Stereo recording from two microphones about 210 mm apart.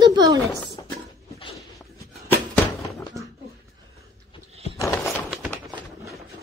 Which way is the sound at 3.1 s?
15° right (ahead or behind).